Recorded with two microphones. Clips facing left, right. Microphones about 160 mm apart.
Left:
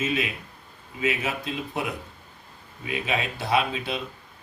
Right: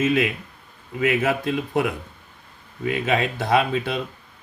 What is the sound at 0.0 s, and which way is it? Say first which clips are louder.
Speech: right 7 dB; 55° right (ahead or behind).